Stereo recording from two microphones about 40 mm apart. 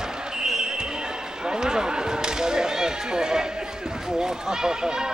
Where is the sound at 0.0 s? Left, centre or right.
Centre.